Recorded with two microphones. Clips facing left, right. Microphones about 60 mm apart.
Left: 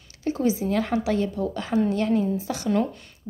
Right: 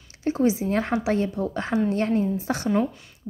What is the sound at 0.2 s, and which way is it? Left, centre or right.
A woman's voice, right.